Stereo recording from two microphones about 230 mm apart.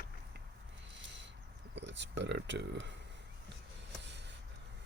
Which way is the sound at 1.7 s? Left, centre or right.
Right.